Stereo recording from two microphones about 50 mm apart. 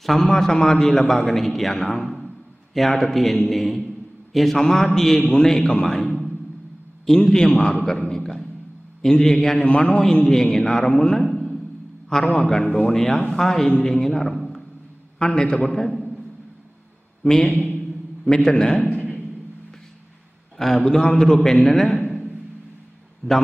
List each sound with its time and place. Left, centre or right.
0.0 s a man's voice: centre
5.9 s a sound: centre
7.2 s a man's voice: centre
10.2 s a man's voice: centre
10.9 s a sound: centre
12.1 s a man's voice: centre
12.6 s speech: left
12.9 s a man's voice: centre
17.2 s speech: left
18.2 s a man's voice: centre
20.5 s a man's voice: centre
23.2 s a man's voice: centre